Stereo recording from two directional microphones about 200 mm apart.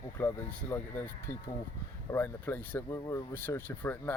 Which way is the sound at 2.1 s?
10° left (ahead or behind).